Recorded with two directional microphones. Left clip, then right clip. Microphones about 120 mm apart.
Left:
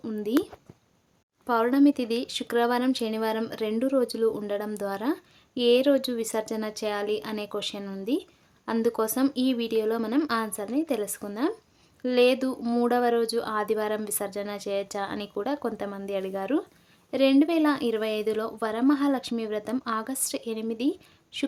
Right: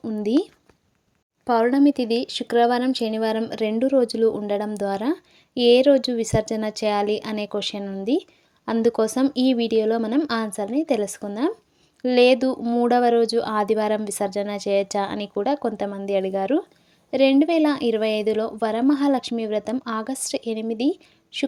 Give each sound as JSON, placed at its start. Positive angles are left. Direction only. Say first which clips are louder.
{"t": 0.2, "sound": "speech", "louder": "right 5 dB", "side_deg": -40}
{"t": 1.5, "sound": "speech", "louder": "right 4 dB", "side_deg": -35}
{"t": 3.5, "sound": "speech", "louder": "right 6 dB", "side_deg": -40}
{"t": 12.6, "sound": "speech", "louder": "even", "side_deg": -20}
{"t": 12.9, "sound": "a child's voice", "louder": "right 7 dB", "side_deg": -40}